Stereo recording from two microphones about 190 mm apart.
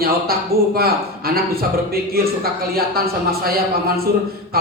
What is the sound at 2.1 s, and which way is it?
Speech, 50° right (ahead or behind).